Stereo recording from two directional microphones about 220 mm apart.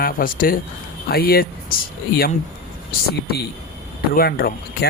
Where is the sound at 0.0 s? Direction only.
40° left (ahead or behind).